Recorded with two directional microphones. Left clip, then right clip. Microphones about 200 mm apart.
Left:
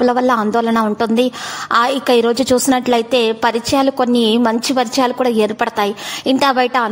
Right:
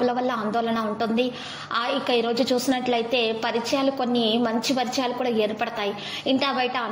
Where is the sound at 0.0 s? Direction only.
50° left (ahead or behind).